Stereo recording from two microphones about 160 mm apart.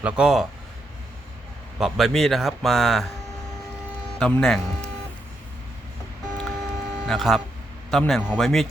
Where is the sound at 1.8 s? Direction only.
Centre (ahead or behind).